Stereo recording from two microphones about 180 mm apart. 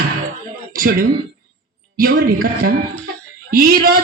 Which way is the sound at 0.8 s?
50° right (ahead or behind).